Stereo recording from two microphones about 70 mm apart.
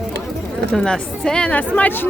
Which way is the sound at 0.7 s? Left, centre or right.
Centre.